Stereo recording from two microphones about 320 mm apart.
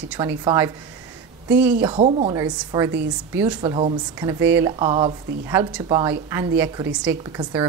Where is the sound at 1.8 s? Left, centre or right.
Centre.